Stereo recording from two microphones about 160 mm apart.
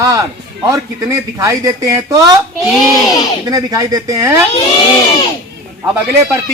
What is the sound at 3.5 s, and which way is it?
Speech, 20° right (ahead or behind).